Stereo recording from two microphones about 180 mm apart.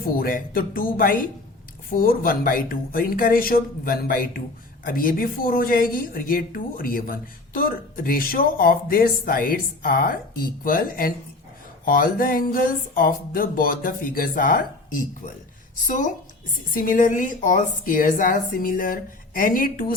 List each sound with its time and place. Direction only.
0.0 s speech: 50° left (ahead or behind)